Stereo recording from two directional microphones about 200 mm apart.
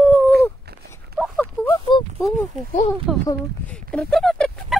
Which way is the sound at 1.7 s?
25° left (ahead or behind).